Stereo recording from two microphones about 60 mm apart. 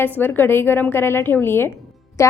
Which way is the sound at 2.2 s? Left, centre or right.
Left.